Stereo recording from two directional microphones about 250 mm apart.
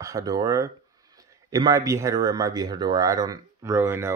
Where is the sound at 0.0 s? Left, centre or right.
Centre.